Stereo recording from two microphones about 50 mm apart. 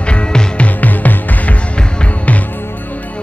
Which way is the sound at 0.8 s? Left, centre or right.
Left.